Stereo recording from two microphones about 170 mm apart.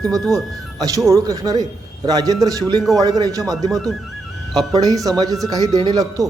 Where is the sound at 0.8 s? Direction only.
20° right (ahead or behind).